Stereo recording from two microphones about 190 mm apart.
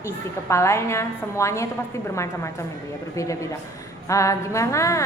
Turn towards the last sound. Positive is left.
turn(degrees=15)  # may be behind; listen again after turning